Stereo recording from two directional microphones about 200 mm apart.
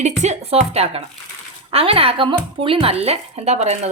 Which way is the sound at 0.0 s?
35° right (ahead or behind).